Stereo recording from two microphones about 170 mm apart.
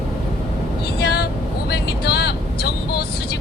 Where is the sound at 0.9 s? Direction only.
75° left (ahead or behind).